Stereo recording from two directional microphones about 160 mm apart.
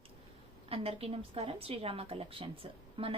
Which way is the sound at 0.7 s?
35° right (ahead or behind).